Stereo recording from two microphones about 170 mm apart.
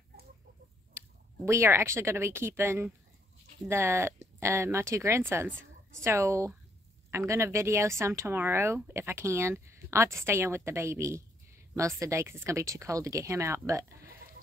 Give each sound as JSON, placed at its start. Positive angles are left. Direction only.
{"t": 0.9, "sound": "speech", "side_deg": -15}